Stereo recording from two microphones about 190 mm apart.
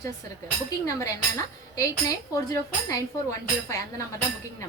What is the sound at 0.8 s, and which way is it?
A woman's voice, 15° left (ahead or behind).